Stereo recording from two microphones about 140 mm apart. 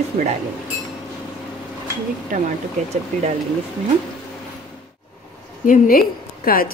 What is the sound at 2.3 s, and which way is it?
Speech, 70° right (ahead or behind).